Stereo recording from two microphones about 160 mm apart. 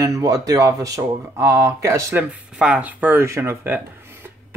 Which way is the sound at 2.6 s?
5° right (ahead or behind).